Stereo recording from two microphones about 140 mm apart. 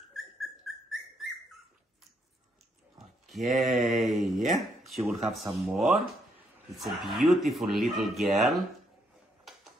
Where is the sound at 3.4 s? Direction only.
55° right (ahead or behind).